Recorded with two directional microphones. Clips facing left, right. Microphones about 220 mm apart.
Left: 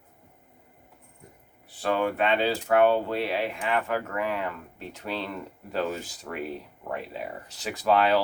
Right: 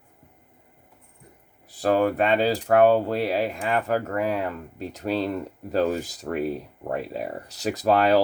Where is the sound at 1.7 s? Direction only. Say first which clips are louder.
Right 5 dB; 40° right (ahead or behind).